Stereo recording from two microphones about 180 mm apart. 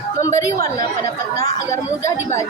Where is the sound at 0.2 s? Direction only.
15° left (ahead or behind).